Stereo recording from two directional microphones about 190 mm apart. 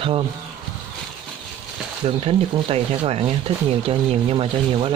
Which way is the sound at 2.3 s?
30° right (ahead or behind).